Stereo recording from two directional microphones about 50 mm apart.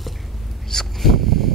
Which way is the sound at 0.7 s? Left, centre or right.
Centre.